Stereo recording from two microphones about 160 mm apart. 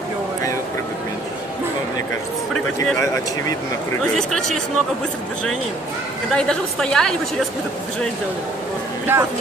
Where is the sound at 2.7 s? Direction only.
20° left (ahead or behind).